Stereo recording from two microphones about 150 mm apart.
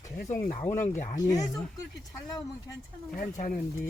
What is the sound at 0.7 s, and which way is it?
Speech, 55° left (ahead or behind).